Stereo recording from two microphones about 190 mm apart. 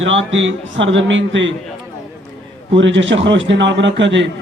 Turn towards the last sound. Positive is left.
turn(degrees=-70)  # may be behind; listen again after turning